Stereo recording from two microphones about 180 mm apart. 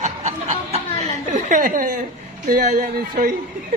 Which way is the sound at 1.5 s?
50° right (ahead or behind).